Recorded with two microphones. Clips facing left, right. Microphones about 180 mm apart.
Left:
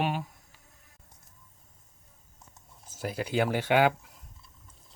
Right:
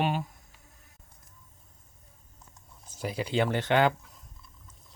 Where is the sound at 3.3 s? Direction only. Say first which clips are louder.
Even; 10° left (ahead or behind).